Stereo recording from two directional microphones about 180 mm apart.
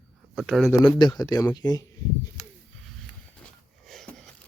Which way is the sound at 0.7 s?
25° left (ahead or behind).